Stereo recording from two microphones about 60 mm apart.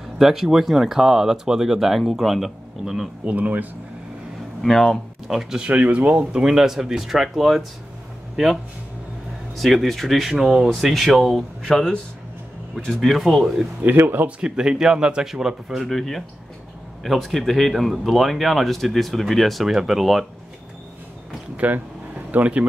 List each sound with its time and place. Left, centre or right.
0.2 s speech: centre
3.3 s speech: right
4.6 s speech: centre
5.6 s speech: right
6.4 s speech: centre
9.6 s speech: centre
13.8 s speech: right
14.4 s speech: centre
21.5 s air conditioning: right